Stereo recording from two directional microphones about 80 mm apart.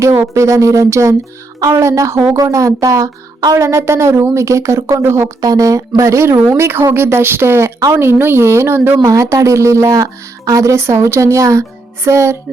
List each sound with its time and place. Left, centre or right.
0.3 s speech: right
5.4 s speech: right
6.0 s a woman's voice: right
9.0 s speech: right